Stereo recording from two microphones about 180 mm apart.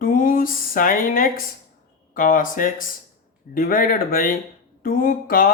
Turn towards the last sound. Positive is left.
turn(degrees=55)  # may be behind; listen again after turning